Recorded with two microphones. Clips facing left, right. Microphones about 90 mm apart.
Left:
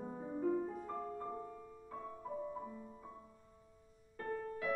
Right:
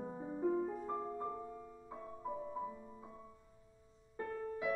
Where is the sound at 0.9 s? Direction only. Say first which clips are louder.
Right 2 dB; 20° right (ahead or behind).